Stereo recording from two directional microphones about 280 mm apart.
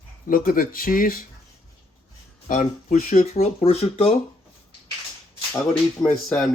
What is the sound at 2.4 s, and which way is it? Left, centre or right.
Speech, left.